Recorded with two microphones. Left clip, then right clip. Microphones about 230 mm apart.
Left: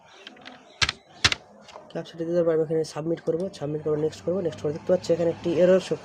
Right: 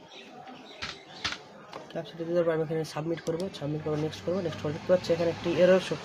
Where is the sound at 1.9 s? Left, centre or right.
Left.